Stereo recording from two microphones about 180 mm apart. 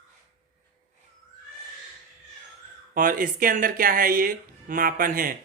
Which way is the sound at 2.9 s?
50° right (ahead or behind).